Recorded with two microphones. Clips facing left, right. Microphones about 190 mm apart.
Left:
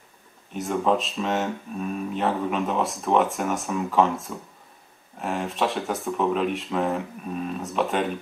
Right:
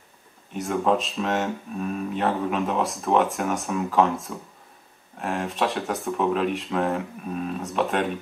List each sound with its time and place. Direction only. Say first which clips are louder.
0.5 s speech: even; centre (ahead or behind)